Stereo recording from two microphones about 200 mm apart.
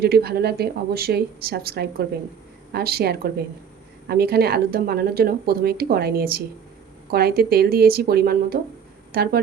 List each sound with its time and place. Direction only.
0.0 s speech: 50° right (ahead or behind)